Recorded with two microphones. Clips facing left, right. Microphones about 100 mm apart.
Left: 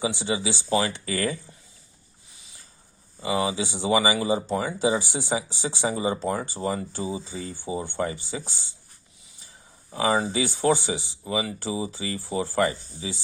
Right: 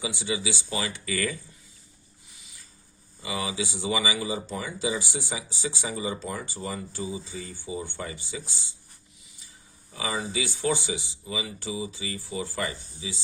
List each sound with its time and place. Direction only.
0.0 s speech: 30° left (ahead or behind)
3.2 s speech: 35° left (ahead or behind)
9.9 s speech: 40° left (ahead or behind)